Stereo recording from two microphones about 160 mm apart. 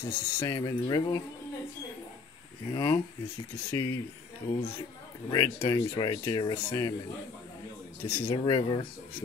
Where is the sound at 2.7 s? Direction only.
25° left (ahead or behind).